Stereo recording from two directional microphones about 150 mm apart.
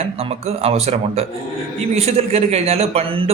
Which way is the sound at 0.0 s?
45° right (ahead or behind).